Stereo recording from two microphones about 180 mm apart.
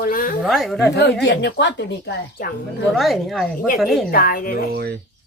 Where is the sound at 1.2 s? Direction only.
75° left (ahead or behind).